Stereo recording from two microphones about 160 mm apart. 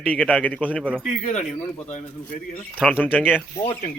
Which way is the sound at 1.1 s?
45° left (ahead or behind).